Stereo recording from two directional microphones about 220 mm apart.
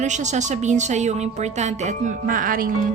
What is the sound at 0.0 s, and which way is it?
A woman's voice, 35° right (ahead or behind).